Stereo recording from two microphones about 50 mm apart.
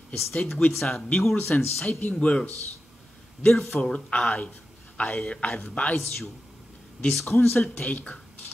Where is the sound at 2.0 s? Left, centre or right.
Left.